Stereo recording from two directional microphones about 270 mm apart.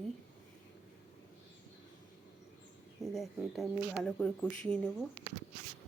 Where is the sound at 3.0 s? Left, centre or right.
Centre.